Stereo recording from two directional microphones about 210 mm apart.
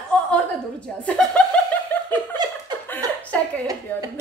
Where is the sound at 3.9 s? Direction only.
10° left (ahead or behind).